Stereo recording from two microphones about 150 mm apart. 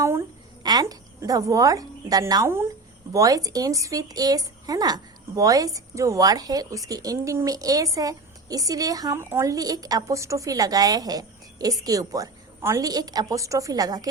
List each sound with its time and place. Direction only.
0.0 s a woman's voice: 20° right (ahead or behind)